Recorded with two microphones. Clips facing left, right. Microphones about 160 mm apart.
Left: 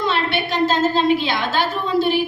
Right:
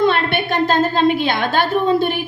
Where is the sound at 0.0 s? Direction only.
55° right (ahead or behind).